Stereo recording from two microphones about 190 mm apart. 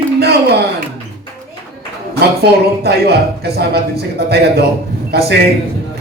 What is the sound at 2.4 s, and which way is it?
A man's voice, 55° right (ahead or behind).